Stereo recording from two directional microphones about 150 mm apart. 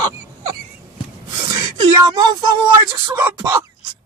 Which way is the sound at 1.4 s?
25° right (ahead or behind).